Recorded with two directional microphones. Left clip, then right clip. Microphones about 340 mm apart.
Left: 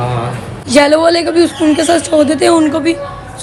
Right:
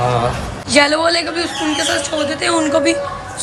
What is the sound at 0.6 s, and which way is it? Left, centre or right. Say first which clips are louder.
A woman's voice: left 5 dB; centre.